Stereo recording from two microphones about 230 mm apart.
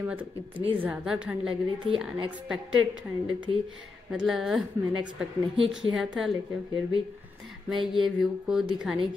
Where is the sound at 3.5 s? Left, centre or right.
Right.